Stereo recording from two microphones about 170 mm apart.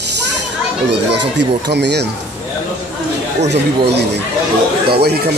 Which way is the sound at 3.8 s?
80° right.